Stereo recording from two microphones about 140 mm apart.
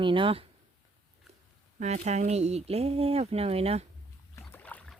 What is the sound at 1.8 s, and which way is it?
Speech, 55° right (ahead or behind).